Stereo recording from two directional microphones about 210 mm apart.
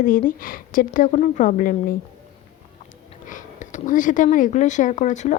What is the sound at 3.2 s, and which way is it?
A woman's voice, 35° left (ahead or behind).